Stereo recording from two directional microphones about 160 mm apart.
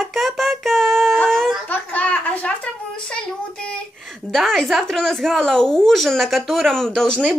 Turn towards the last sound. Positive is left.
turn(degrees=5)  # may be behind; listen again after turning